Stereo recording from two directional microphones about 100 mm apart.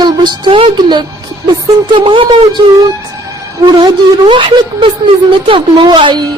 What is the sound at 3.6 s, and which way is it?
A woman's voice, 45° right (ahead or behind).